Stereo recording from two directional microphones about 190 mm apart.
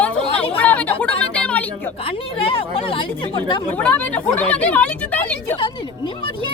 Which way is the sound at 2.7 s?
30° left (ahead or behind).